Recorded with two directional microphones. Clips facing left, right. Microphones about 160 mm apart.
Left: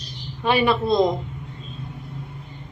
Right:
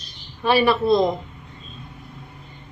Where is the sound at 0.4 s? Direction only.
20° left (ahead or behind).